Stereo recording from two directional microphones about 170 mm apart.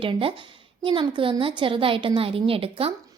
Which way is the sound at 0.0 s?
30° right (ahead or behind).